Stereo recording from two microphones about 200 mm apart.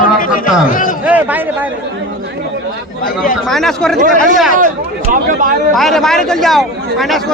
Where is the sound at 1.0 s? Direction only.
10° right (ahead or behind).